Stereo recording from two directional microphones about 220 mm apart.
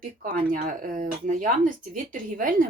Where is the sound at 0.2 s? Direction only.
40° right (ahead or behind).